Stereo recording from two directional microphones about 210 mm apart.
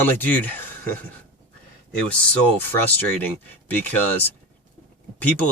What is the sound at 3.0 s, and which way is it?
Speech, 10° left (ahead or behind).